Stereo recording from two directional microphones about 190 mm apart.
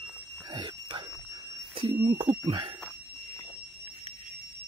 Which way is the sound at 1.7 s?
25° right (ahead or behind).